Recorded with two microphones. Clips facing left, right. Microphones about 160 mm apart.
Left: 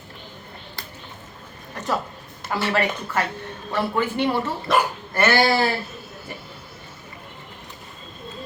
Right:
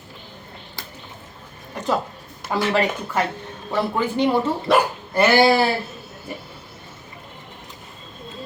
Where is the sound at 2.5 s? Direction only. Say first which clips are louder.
Right 2 dB; 15° right (ahead or behind).